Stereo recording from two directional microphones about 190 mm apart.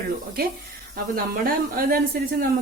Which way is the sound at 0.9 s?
50° right (ahead or behind).